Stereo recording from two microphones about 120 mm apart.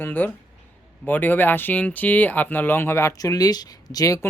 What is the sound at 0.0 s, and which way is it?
Speech, 15° left (ahead or behind).